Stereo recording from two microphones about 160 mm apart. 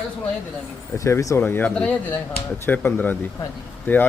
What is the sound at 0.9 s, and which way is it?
Speech, 20° left (ahead or behind).